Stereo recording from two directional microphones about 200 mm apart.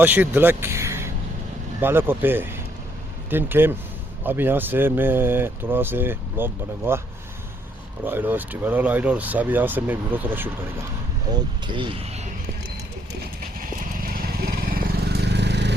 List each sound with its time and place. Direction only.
0.0 s speech: 10° right (ahead or behind)
8.0 s speech: 10° right (ahead or behind)
11.3 s speech: 20° right (ahead or behind)
13.6 s vehicle: 45° right (ahead or behind)